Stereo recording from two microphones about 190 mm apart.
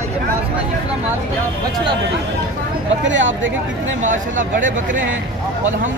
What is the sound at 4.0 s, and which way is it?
Speech, 40° right (ahead or behind).